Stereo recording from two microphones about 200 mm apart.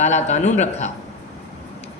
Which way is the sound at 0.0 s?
35° left (ahead or behind).